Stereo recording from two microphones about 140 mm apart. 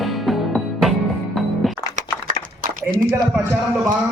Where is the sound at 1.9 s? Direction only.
80° right.